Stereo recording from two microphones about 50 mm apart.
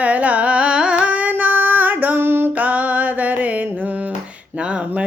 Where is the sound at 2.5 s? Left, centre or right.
Right.